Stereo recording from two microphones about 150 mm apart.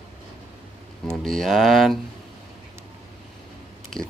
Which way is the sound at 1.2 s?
Centre (ahead or behind).